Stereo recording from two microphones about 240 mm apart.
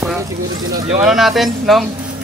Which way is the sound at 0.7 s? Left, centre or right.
Right.